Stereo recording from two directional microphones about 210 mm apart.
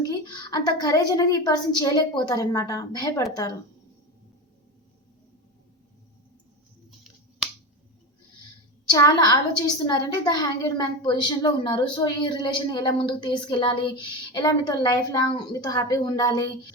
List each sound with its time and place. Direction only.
0.1 s a woman's voice: 20° left (ahead or behind)
8.9 s a woman's voice: 15° left (ahead or behind)